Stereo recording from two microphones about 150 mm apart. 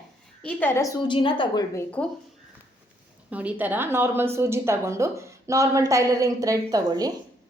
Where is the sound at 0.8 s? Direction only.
20° left (ahead or behind).